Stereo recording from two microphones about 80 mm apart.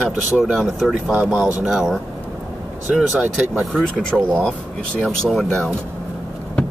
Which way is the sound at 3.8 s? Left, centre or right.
Centre.